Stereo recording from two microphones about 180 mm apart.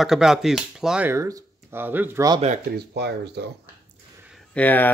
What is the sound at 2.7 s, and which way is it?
Speech, 65° right (ahead or behind).